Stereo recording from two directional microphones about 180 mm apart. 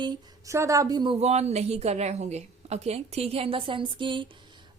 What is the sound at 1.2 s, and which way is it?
A woman's voice, 35° right (ahead or behind).